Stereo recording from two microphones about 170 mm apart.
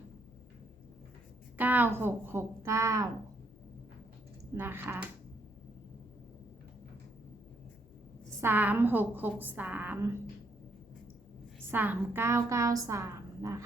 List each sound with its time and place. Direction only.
1.5 s a woman's voice: 10° right (ahead or behind)
4.5 s a woman's voice: 15° right (ahead or behind)
8.4 s a woman's voice: 10° right (ahead or behind)
11.7 s a woman's voice: 10° right (ahead or behind)